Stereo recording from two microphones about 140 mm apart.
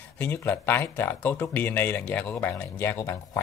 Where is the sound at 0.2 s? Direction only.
15° left (ahead or behind).